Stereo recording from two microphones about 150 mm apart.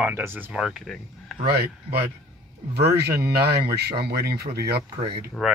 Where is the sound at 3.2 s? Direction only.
90° right.